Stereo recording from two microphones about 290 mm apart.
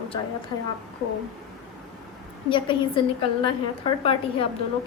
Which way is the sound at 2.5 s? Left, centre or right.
Centre.